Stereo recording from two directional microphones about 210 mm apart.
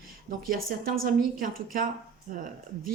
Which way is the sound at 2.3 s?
40° right (ahead or behind).